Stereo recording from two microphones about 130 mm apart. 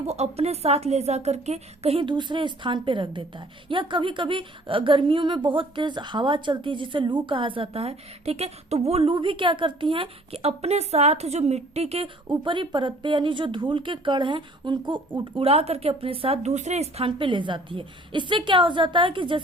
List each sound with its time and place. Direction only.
0.0 s a woman's voice: 55° right (ahead or behind); by 19.4 s 40° right (ahead or behind)